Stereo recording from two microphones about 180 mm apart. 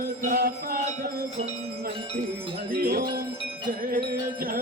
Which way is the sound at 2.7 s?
55° right (ahead or behind).